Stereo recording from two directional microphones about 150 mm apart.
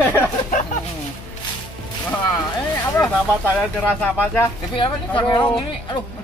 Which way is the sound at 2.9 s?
10° left (ahead or behind).